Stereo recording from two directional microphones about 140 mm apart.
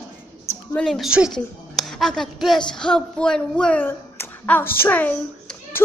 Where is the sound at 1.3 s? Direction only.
5° left (ahead or behind).